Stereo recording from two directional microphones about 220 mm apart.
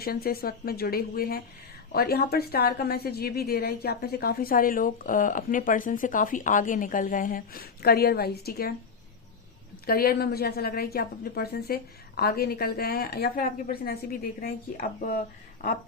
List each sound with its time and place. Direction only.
0.0 s a woman's voice: 45° left (ahead or behind)
9.8 s a woman's voice: 45° left (ahead or behind)